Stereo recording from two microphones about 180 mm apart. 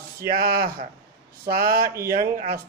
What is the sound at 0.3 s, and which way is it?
Speech, 55° right (ahead or behind).